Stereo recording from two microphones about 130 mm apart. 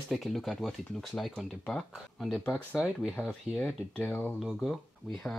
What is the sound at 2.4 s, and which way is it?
Speech, 15° left (ahead or behind).